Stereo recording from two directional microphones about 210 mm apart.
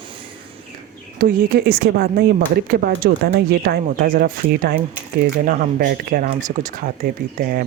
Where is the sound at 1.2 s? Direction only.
45° right (ahead or behind).